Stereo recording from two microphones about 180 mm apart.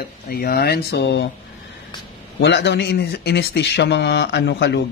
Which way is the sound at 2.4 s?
75° left (ahead or behind).